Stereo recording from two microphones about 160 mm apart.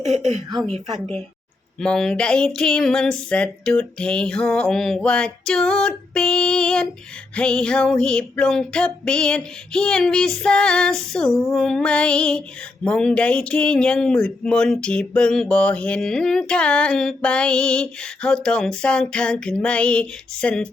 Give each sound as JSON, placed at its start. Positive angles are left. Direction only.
{"t": 1.8, "sound": "speech", "side_deg": 5}